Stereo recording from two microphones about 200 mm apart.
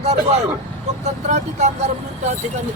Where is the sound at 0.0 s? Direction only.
30° right (ahead or behind).